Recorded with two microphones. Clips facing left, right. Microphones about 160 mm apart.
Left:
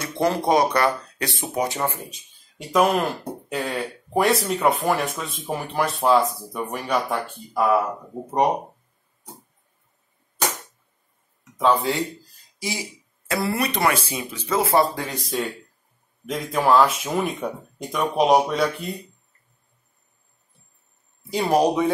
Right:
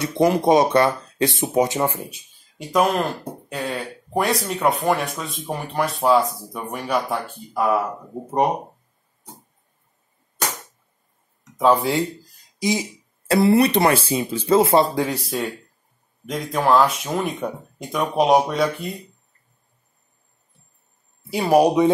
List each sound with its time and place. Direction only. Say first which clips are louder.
0.0 s speech: right 4 dB; 15° right (ahead or behind)
2.7 s speech: even; centre (ahead or behind)
11.5 s speech: right 3 dB; 15° right (ahead or behind)
12.5 s a sound: right 8 dB; 20° right (ahead or behind)
13.3 s speech: right 9 dB; 30° right (ahead or behind)
15.0 s speech: right 4 dB; 10° right (ahead or behind)
21.3 s speech: right 3 dB; 10° right (ahead or behind)